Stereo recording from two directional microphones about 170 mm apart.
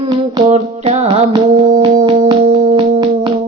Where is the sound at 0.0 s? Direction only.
35° right (ahead or behind).